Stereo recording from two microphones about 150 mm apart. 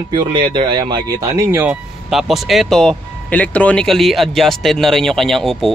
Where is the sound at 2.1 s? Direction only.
Centre (ahead or behind).